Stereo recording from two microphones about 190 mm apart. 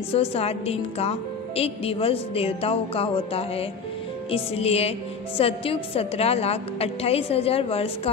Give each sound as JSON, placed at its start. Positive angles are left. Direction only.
{"t": 0.1, "sound": "a woman's voice", "side_deg": 30}